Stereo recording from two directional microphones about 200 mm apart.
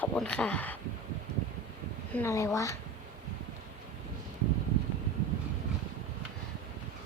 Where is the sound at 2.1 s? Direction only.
15° left (ahead or behind).